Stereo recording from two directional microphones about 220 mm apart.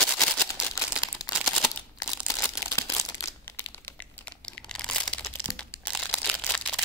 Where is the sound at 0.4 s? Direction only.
5° left (ahead or behind).